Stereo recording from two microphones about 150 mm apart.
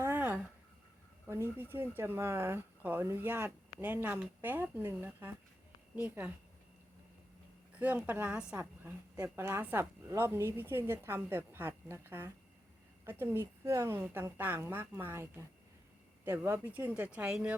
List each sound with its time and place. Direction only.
0.0 s a sound: 15° right (ahead or behind)
1.3 s speech: 15° right (ahead or behind)
7.8 s speech: 10° right (ahead or behind)